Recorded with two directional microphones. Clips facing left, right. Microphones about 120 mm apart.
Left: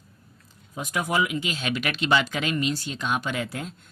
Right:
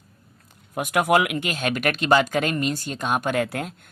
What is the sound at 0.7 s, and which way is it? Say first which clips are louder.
Speech: right 8 dB; 65° right (ahead or behind).